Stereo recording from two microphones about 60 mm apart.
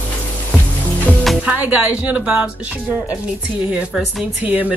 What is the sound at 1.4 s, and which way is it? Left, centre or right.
Music, right.